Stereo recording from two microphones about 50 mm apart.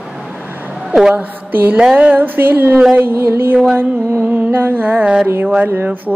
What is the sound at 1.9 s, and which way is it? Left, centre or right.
Mantra, right.